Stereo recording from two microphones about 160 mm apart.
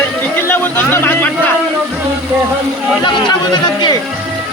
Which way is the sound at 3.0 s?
30° left (ahead or behind).